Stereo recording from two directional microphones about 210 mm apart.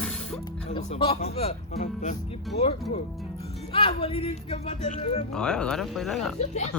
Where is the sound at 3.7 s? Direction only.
25° left (ahead or behind).